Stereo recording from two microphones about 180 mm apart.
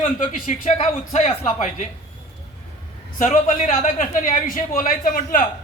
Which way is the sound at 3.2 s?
45° left (ahead or behind).